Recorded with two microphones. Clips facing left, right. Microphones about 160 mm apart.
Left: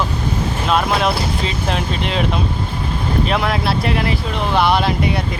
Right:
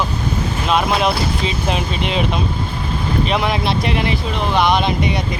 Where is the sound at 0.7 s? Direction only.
5° right (ahead or behind).